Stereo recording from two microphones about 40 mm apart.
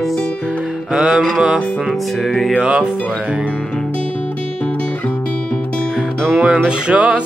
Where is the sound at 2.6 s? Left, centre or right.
Right.